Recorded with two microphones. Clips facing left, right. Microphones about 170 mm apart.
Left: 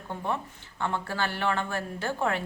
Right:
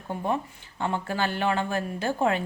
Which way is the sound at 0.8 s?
15° right (ahead or behind).